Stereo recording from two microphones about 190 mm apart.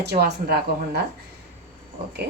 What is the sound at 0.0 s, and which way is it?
Speech, 60° right (ahead or behind).